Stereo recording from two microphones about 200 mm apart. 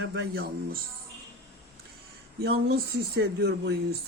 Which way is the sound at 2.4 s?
50° right (ahead or behind).